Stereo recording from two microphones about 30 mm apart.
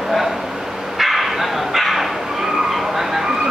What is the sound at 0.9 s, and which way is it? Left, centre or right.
Dog, centre.